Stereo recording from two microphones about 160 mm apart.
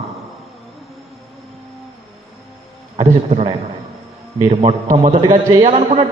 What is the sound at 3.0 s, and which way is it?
A man's voice, 40° right (ahead or behind).